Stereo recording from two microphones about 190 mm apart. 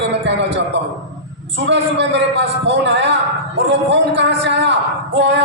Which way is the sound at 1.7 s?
65° right (ahead or behind).